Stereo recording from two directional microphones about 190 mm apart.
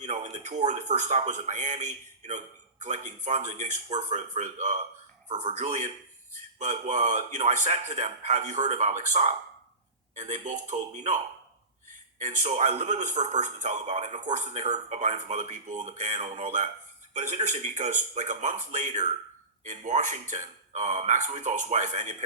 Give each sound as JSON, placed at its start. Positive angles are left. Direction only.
{"t": 0.0, "sound": "a man's voice", "side_deg": -40}
{"t": 12.2, "sound": "a man's voice", "side_deg": -40}